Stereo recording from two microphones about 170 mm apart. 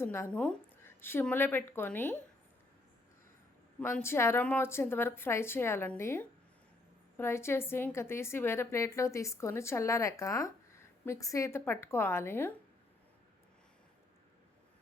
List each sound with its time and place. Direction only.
0.0 s a woman's voice: 15° left (ahead or behind)
3.8 s a woman's voice: 10° left (ahead or behind)